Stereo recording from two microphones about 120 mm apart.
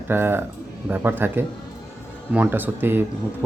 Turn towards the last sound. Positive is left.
turn(degrees=-15)  # may be behind; listen again after turning